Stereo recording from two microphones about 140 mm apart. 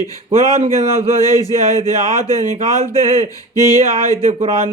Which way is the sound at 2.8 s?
50° right (ahead or behind).